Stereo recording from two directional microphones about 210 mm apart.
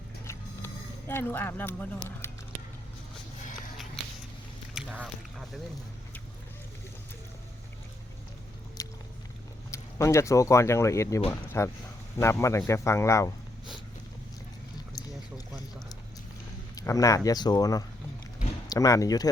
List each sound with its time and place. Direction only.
0.3 s a sound: 10° left (ahead or behind)
4.7 s speech: 5° right (ahead or behind)
8.8 s vehicle: 15° left (ahead or behind)
9.7 s speech: 15° left (ahead or behind)
16.7 s speech: 15° left (ahead or behind)